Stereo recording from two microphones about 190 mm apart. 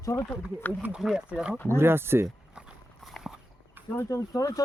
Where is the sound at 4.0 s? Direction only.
15° left (ahead or behind).